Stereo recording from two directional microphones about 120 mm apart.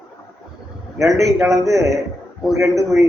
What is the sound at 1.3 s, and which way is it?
Speech, centre (ahead or behind).